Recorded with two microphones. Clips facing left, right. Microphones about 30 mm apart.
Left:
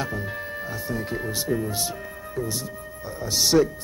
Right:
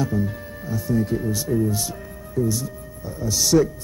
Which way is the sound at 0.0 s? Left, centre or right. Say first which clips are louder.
Right 4 dB; left.